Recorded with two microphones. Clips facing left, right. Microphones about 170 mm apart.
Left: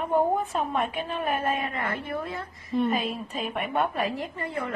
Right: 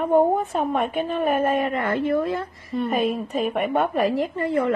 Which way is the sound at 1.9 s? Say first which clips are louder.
Right 10 dB; 90° right.